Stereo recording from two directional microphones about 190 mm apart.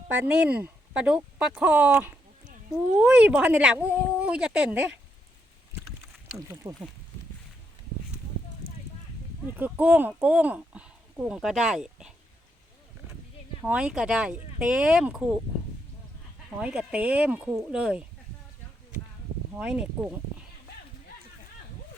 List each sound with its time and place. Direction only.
0.1 s speech: 5° right (ahead or behind)
6.3 s speech: 15° right (ahead or behind)
9.6 s speech: 10° right (ahead or behind)
13.6 s speech: 10° right (ahead or behind)
16.6 s speech: 5° right (ahead or behind)
19.5 s speech: 5° right (ahead or behind)